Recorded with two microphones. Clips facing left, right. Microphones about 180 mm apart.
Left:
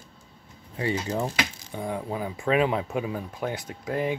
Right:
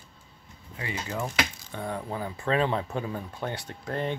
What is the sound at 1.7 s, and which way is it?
Speech, 15° left (ahead or behind).